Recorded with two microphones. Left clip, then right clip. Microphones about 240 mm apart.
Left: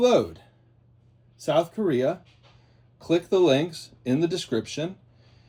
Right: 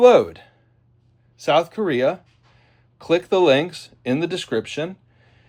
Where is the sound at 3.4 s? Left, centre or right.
Right.